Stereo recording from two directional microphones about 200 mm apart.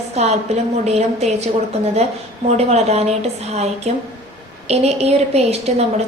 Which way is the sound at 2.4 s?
30° right (ahead or behind).